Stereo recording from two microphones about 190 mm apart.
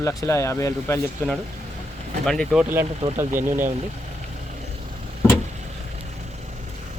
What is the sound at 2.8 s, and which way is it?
Speech, 30° right (ahead or behind).